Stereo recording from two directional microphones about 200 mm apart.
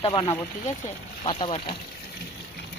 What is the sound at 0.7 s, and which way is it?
Speech, 35° left (ahead or behind).